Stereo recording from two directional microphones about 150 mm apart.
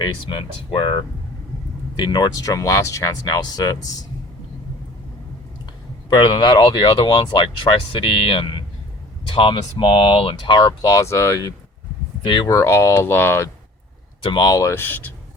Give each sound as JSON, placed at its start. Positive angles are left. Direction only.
{"t": 0.0, "sound": "speech", "side_deg": 35}
{"t": 6.1, "sound": "speech", "side_deg": 35}
{"t": 12.2, "sound": "speech", "side_deg": 30}
{"t": 12.5, "sound": "speech", "side_deg": 20}
{"t": 14.2, "sound": "speech", "side_deg": 30}